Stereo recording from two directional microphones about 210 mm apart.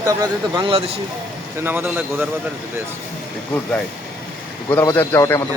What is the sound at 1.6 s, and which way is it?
Speech, 10° right (ahead or behind).